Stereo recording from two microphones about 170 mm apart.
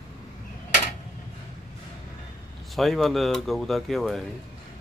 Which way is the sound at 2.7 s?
Centre (ahead or behind).